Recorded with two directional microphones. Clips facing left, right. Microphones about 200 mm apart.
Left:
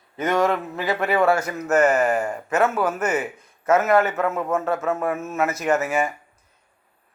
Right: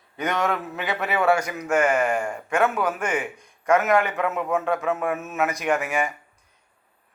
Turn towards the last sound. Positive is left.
turn(degrees=5)  # may be behind; listen again after turning